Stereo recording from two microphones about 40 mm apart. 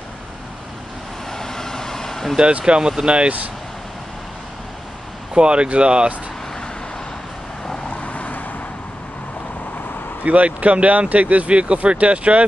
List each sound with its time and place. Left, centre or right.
1.3 s vehicle: centre
2.6 s speech: right
5.3 s speech: right
8.0 s vehicle: left
10.2 s speech: right